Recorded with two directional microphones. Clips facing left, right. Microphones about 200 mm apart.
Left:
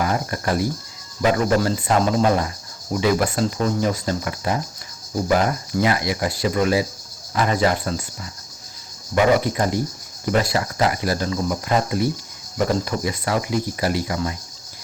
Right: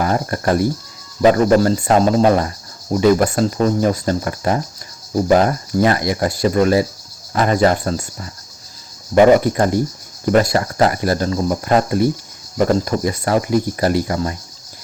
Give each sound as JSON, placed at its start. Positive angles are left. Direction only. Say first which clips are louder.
{"t": 0.0, "sound": "speech", "louder": "right 4 dB", "side_deg": -45}